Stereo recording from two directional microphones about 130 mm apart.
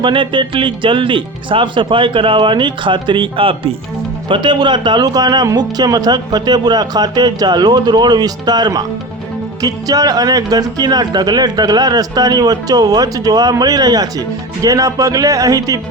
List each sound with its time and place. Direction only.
0.0 s a man's voice: 40° right (ahead or behind)